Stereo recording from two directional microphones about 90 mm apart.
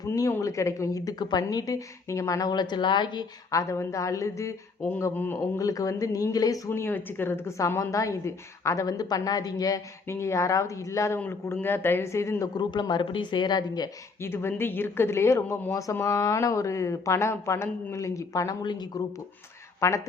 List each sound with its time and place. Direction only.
0.2 s a woman's voice: 35° left (ahead or behind); by 3.2 s 55° left (ahead or behind)
3.5 s a woman's voice: 35° left (ahead or behind)
5.1 s speech: 20° left (ahead or behind)
5.5 s a woman's voice: 40° left (ahead or behind)
6.7 s a woman's voice: 25° left (ahead or behind); by 9.8 s 45° left (ahead or behind)
10.1 s a woman's voice: 30° left (ahead or behind)
12.5 s speech: 55° left (ahead or behind)
14.2 s a woman's voice: 25° left (ahead or behind)
18.6 s speech: 55° left (ahead or behind)
19.8 s a woman's voice: 30° left (ahead or behind)